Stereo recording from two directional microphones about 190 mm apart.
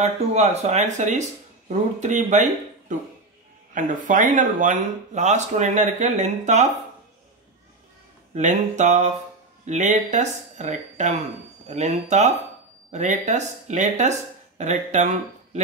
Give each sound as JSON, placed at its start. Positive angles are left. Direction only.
{"t": 0.0, "sound": "speech", "side_deg": -35}
{"t": 8.4, "sound": "speech", "side_deg": -40}